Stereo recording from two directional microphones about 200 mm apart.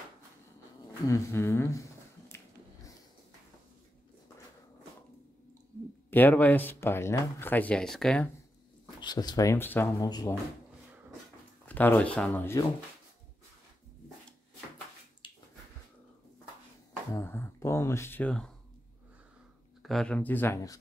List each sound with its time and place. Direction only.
1.0 s a sound: 15° left (ahead or behind)
6.0 s speech: 10° left (ahead or behind)
9.0 s speech: 20° left (ahead or behind)
11.6 s speech: 10° left (ahead or behind)
15.2 s a sound: 25° left (ahead or behind)
17.1 s speech: 10° left (ahead or behind)
19.8 s speech: centre (ahead or behind)